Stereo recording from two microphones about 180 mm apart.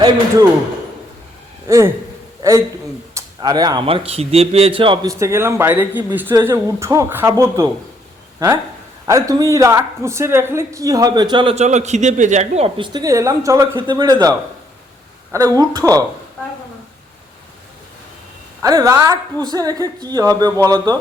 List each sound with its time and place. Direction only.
1.6 s a man's voice: 15° right (ahead or behind)
5.2 s speech: 15° right (ahead or behind)
9.0 s a woman's voice: 20° right (ahead or behind)
18.6 s a woman's voice: 20° right (ahead or behind)